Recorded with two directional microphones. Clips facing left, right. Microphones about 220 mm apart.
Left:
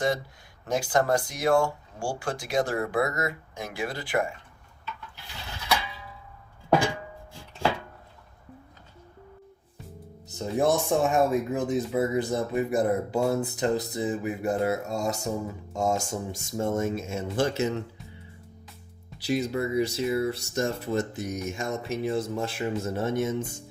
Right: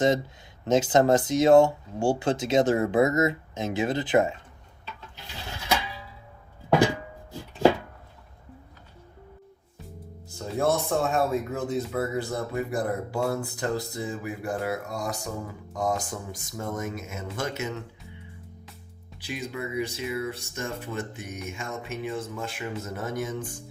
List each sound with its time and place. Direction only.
0.6 s speech: 20° right (ahead or behind)
10.2 s speech: 20° left (ahead or behind)
19.2 s speech: 40° left (ahead or behind)